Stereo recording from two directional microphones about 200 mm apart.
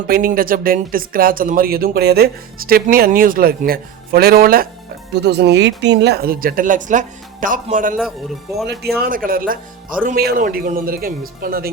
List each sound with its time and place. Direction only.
0.1 s a man's voice: 45° right (ahead or behind)
9.0 s speech: 45° right (ahead or behind)